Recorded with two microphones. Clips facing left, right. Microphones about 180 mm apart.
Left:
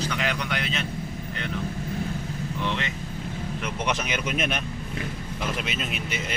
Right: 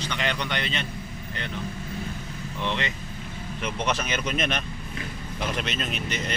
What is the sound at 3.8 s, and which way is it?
Speech, 15° left (ahead or behind).